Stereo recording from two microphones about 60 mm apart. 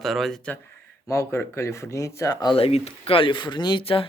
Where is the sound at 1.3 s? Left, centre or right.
Left.